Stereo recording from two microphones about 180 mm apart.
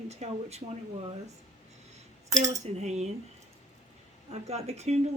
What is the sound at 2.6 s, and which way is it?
Speech, 40° right (ahead or behind).